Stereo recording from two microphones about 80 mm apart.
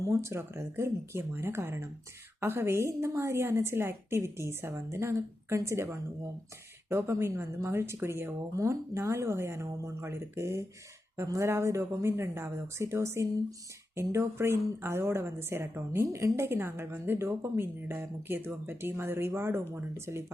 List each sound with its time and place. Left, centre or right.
0.0 s speech: right